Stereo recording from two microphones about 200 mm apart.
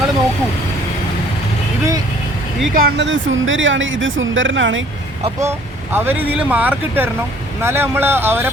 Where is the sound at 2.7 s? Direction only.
55° right (ahead or behind); by 4.8 s 70° right (ahead or behind).